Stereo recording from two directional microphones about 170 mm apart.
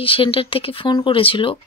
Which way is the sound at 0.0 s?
30° left (ahead or behind).